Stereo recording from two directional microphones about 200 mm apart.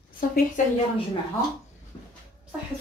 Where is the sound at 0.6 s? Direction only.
40° left (ahead or behind).